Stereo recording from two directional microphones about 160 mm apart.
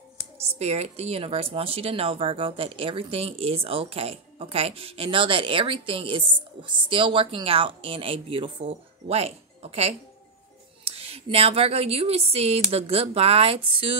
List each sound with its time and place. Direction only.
0.6 s a woman's voice: 40° right (ahead or behind)